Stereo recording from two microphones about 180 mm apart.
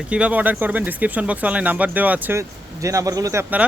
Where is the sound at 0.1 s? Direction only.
5° right (ahead or behind).